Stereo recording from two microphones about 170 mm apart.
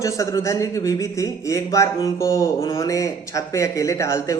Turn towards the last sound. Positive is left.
turn(degrees=15)  # may be behind; listen again after turning